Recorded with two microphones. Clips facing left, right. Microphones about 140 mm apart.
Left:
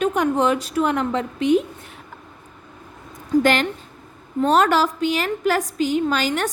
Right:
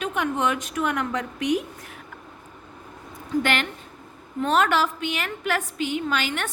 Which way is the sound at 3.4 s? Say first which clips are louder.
Left 6 dB; 35° left (ahead or behind).